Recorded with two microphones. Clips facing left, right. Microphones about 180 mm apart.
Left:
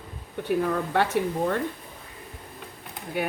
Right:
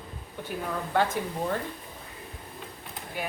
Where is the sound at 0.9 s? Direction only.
70° left (ahead or behind).